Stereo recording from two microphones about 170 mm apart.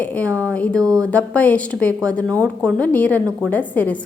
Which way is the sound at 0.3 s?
15° right (ahead or behind).